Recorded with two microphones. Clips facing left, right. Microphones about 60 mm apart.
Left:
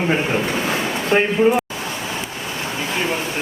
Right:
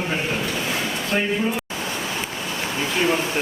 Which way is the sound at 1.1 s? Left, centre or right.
Left.